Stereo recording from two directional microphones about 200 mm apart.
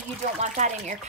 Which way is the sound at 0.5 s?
35° right (ahead or behind).